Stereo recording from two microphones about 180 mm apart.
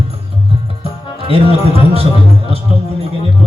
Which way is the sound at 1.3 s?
35° right (ahead or behind).